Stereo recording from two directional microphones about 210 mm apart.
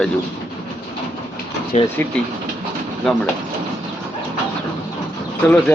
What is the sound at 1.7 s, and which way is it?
Speech, 35° left (ahead or behind).